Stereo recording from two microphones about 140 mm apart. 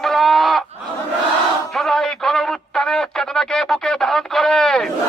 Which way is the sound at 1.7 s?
Centre (ahead or behind).